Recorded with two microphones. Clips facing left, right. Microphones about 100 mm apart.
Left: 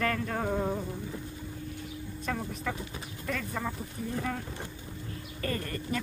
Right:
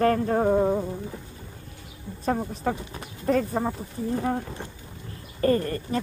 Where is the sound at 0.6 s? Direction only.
25° right (ahead or behind).